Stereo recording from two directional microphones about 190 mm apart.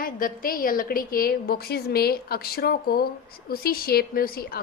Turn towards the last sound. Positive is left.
turn(degrees=50)  # may be behind; listen again after turning